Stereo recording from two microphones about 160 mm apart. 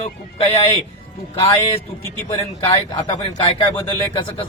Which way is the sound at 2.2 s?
35° left (ahead or behind).